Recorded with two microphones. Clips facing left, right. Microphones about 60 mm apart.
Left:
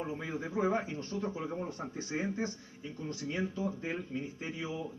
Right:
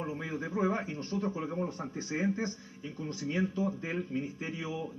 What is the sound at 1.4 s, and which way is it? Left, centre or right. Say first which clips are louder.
Speech: right 3 dB; centre.